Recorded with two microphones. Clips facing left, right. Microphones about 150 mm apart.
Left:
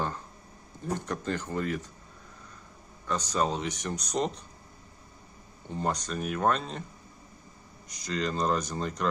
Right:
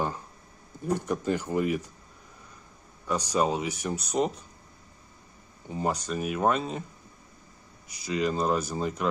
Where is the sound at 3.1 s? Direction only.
10° right (ahead or behind).